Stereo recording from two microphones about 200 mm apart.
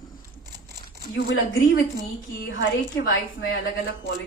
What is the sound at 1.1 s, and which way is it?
A woman's voice, 70° left (ahead or behind).